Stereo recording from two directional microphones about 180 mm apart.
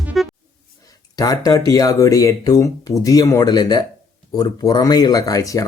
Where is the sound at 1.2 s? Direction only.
20° left (ahead or behind).